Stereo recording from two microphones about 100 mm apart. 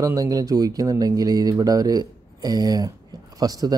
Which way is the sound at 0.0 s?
35° right (ahead or behind).